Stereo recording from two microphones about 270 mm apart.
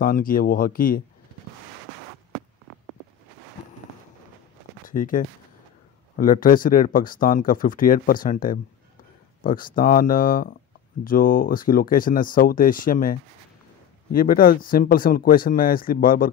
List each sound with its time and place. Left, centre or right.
0.0 s speech: left
4.8 s speech: left